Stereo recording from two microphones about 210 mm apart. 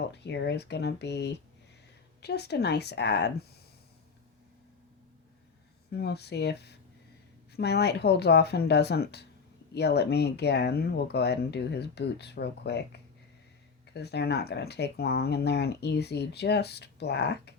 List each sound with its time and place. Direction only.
0.0 s speech: 55° left (ahead or behind)
5.9 s speech: 50° left (ahead or behind)